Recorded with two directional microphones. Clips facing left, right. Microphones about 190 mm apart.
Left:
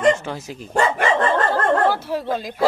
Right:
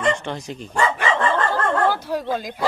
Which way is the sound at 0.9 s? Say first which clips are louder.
Left 2 dB; 40° left (ahead or behind).